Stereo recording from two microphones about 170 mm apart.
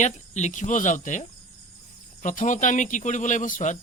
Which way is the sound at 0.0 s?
45° left (ahead or behind).